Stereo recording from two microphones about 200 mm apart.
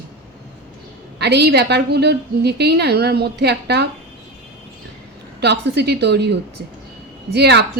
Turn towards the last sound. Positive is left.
turn(degrees=-55)  # may be behind; listen again after turning